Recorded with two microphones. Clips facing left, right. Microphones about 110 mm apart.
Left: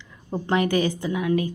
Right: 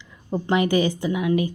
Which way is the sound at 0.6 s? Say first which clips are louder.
Right 2 dB; 45° left (ahead or behind).